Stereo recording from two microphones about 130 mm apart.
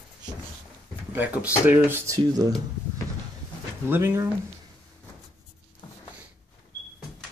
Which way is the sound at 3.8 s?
15° right (ahead or behind).